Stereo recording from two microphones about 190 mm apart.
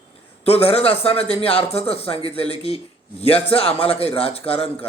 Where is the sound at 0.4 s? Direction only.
30° left (ahead or behind).